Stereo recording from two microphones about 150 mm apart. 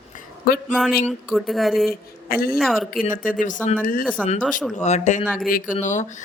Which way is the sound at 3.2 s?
60° left (ahead or behind).